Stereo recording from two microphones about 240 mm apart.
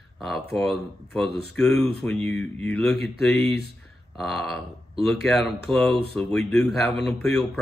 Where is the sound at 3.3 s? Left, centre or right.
Left.